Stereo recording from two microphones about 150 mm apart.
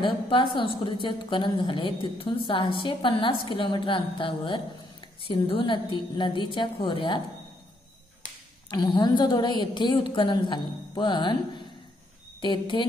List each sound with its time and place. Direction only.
0.0 s a woman's voice: 35° left (ahead or behind)
8.6 s a woman's voice: 30° left (ahead or behind)
12.4 s a woman's voice: 35° left (ahead or behind)